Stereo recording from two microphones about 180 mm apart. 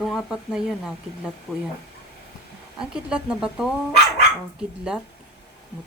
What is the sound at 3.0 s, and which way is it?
Speech, 5° right (ahead or behind).